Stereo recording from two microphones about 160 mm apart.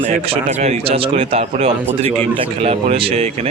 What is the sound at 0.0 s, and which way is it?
Speech, 40° right (ahead or behind).